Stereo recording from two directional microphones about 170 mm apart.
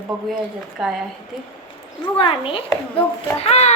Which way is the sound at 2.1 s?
30° left (ahead or behind).